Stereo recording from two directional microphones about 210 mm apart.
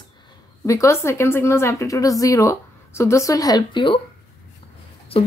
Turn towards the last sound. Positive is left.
turn(degrees=25)  # may be behind; listen again after turning